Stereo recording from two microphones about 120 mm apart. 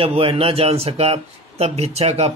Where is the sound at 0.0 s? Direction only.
50° right (ahead or behind).